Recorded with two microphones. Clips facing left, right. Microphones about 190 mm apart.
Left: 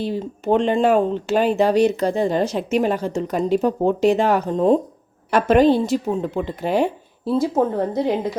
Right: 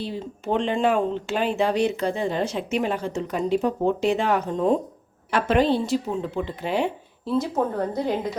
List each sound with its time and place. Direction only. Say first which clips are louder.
0.0 s speech: left 6 dB; 45° left (ahead or behind)
5.3 s speech: left 6 dB; 45° left (ahead or behind)
7.3 s a woman's voice: left 5 dB; 30° left (ahead or behind)